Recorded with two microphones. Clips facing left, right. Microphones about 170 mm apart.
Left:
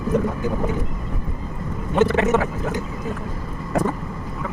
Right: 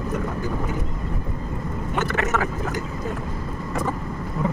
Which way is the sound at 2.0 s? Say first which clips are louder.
Left 7 dB; 25° left (ahead or behind).